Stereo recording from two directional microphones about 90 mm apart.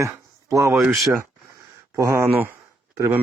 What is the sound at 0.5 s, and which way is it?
Speech, 40° right (ahead or behind).